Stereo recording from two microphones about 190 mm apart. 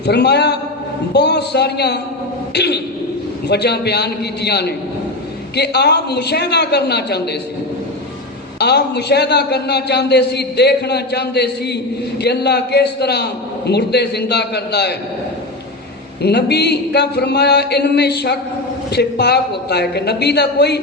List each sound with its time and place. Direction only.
0.0 s a man's voice: 60° left (ahead or behind)
8.5 s a man's voice: 60° left (ahead or behind)
16.2 s a man's voice: 60° left (ahead or behind)